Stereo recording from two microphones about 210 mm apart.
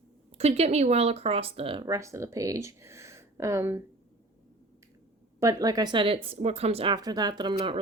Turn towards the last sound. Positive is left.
turn(degrees=-25)  # may be behind; listen again after turning